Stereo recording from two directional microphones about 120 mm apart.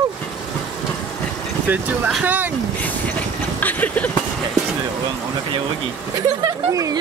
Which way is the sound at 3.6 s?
15° left (ahead or behind).